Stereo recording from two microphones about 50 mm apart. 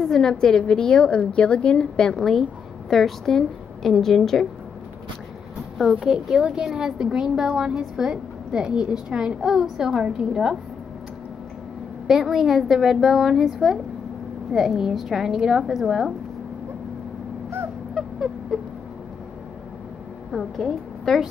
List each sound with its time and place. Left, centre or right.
0.0 s a woman's voice: centre
0.3 s a woman's voice: centre
5.9 s a woman's voice: centre
12.1 s a woman's voice: centre
17.9 s a sound: centre
20.2 s a woman's voice: centre